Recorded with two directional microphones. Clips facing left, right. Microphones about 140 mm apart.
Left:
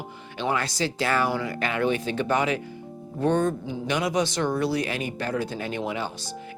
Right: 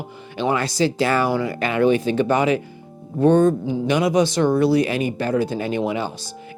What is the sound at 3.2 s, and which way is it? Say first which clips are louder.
Music: right 8 dB; 25° right (ahead or behind).